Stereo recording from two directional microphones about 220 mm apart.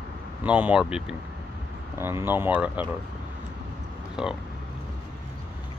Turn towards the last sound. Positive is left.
turn(degrees=-5)  # may be behind; listen again after turning